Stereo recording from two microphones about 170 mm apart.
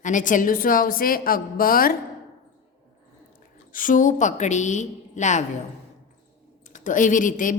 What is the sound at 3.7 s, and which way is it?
A woman's voice, 50° left (ahead or behind).